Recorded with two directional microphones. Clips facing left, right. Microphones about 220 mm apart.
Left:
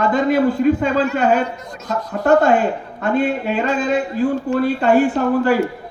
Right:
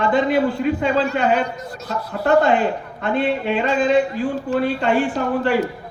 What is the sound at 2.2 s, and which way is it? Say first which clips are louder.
Speech: left 2 dB; 45° left (ahead or behind).